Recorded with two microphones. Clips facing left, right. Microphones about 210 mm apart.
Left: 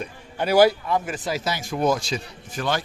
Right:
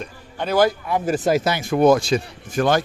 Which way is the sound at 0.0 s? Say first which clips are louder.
Left 1 dB; 10° left (ahead or behind).